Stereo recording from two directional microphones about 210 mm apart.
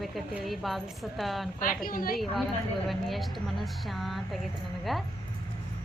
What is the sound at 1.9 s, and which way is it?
Speech, 40° left (ahead or behind).